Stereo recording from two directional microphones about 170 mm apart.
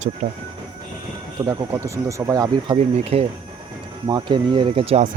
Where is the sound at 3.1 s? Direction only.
35° right (ahead or behind).